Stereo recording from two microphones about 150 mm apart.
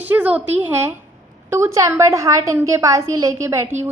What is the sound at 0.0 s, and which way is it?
A woman's voice, 10° right (ahead or behind).